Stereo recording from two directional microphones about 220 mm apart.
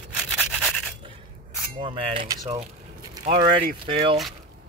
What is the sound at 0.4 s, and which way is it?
Rub, 5° right (ahead or behind).